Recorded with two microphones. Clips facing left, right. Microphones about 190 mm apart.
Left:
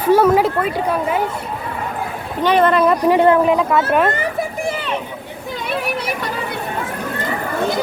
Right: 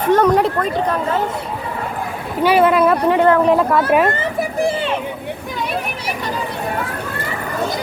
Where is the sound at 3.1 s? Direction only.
20° left (ahead or behind).